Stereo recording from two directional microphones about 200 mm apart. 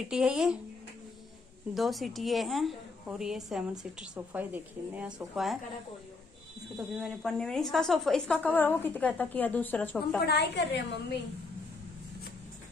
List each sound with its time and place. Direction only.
0.1 s a woman's voice: 5° right (ahead or behind)
1.7 s a woman's voice: centre (ahead or behind)
6.8 s a woman's voice: centre (ahead or behind)
10.2 s a woman's voice: 55° left (ahead or behind)